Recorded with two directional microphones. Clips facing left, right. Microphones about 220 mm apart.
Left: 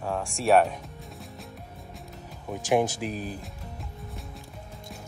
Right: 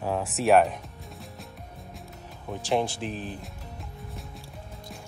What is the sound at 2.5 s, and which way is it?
Speech, centre (ahead or behind).